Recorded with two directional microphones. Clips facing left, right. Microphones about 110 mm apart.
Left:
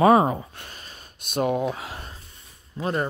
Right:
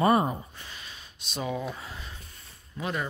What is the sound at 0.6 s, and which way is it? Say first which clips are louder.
Speech: left 2 dB; 50° left (ahead or behind).